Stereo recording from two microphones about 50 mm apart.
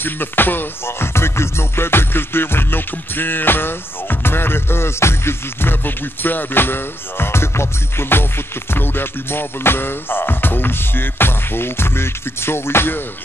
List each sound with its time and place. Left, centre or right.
0.0 s music: left